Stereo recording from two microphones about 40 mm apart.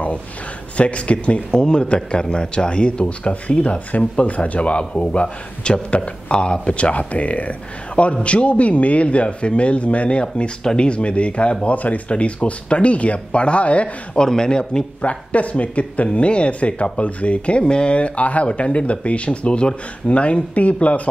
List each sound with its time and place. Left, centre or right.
0.7 s speech: left
14.1 s speech: centre
15.0 s speech: left